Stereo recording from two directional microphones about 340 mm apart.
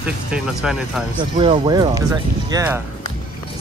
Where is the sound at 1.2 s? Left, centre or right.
Centre.